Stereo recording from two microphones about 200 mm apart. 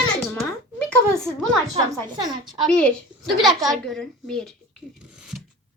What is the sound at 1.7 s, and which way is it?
Speech, 20° right (ahead or behind).